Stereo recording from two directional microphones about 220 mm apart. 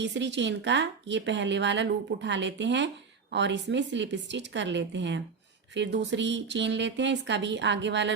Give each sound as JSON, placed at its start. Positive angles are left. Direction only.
{"t": 0.0, "sound": "a woman's voice", "side_deg": -55}